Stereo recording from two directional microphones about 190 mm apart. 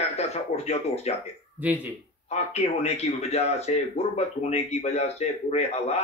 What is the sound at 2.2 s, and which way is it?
Speech, 35° left (ahead or behind).